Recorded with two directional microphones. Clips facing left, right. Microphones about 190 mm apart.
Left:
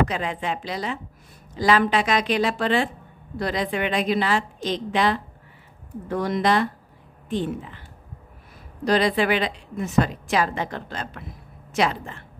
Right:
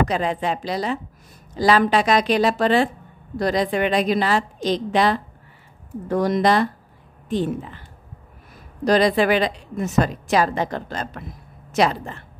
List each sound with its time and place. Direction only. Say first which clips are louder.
0.1 s a woman's voice: right 5 dB; 35° right (ahead or behind)
8.8 s a woman's voice: right 3 dB; 40° right (ahead or behind)